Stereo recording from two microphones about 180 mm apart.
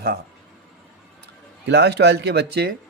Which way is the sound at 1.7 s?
70° right (ahead or behind).